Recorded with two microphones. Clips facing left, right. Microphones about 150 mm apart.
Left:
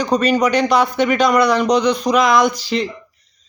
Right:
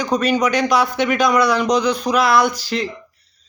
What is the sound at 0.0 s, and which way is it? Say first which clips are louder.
Speech: left 2 dB; 10° right (ahead or behind).